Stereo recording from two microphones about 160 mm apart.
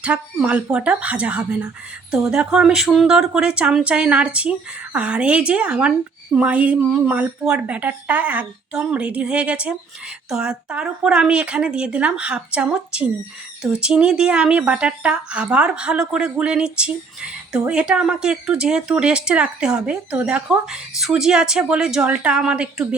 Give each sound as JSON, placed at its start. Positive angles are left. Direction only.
{"t": 0.0, "sound": "speech", "side_deg": -5}